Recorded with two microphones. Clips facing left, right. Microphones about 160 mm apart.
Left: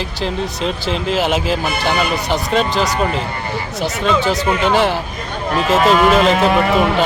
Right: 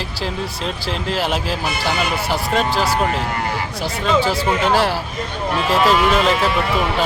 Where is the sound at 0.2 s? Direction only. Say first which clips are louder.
Left 4 dB; centre (ahead or behind).